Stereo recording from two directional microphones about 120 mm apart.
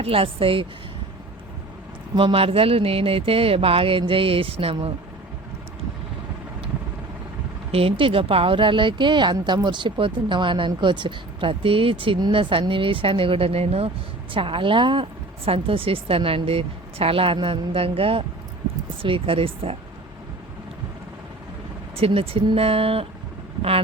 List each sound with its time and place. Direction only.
0.0 s speech: 50° right (ahead or behind)
2.1 s speech: 50° right (ahead or behind)
7.7 s speech: 50° right (ahead or behind)
21.9 s speech: 50° right (ahead or behind)